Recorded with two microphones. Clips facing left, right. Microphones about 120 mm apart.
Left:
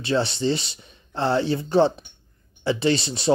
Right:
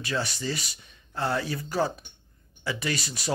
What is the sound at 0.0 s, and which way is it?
Speech, 30° left (ahead or behind).